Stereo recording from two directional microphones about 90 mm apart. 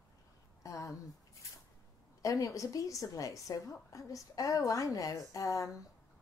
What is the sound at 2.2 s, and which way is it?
A woman's voice, 40° left (ahead or behind).